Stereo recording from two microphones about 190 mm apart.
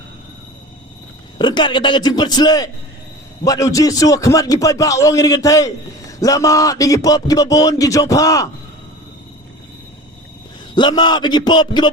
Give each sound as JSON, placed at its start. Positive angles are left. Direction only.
{"t": 1.4, "sound": "a man's voice", "side_deg": 25}
{"t": 10.8, "sound": "a man's voice", "side_deg": 25}